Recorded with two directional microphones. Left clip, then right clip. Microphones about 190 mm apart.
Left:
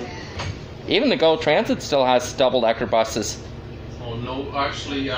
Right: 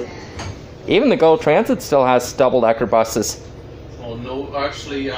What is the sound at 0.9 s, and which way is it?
A man's voice, 25° right (ahead or behind).